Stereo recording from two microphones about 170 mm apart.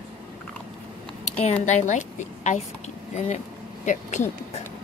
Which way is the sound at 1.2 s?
40° left (ahead or behind).